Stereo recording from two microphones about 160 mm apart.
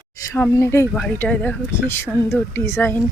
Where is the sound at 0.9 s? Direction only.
Centre (ahead or behind).